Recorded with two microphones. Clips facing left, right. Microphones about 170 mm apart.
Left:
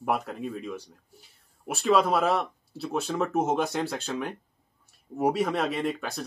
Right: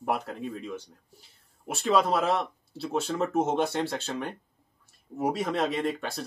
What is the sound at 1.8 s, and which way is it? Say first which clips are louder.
Speech: left 2 dB; centre (ahead or behind).